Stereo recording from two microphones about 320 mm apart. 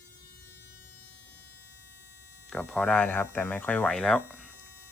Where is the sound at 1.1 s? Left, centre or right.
Left.